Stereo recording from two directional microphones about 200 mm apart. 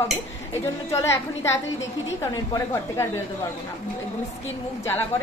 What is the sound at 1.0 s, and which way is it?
A woman's voice, 15° left (ahead or behind).